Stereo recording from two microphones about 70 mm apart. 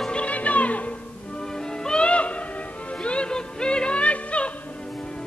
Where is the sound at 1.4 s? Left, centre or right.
Centre.